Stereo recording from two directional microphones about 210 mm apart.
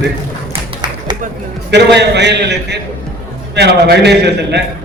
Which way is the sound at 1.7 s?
55° right (ahead or behind).